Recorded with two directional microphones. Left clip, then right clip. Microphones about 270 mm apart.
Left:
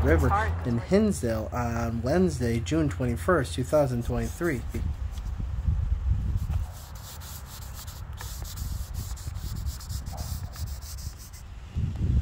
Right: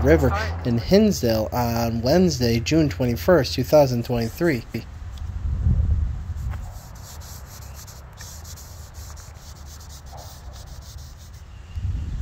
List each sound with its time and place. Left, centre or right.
0.0 s speech: centre